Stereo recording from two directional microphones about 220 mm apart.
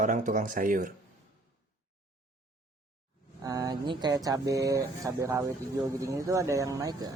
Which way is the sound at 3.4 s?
15° right (ahead or behind).